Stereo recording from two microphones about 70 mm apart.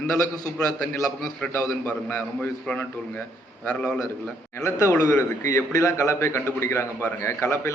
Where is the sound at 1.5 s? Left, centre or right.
Left.